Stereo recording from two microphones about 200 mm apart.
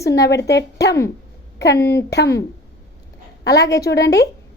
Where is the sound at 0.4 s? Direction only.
55° left (ahead or behind).